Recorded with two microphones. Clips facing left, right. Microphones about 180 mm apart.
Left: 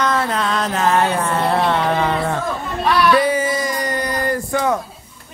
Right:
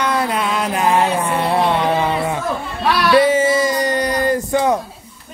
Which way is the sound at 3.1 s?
25° right (ahead or behind).